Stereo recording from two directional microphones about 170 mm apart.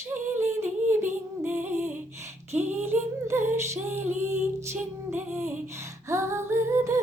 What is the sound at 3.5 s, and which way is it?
Music, 15° right (ahead or behind).